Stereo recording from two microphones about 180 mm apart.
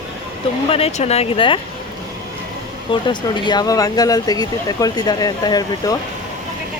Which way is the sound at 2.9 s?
25° left (ahead or behind).